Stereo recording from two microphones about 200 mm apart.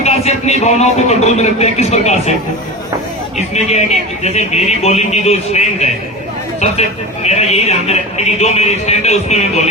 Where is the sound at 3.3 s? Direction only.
35° left (ahead or behind).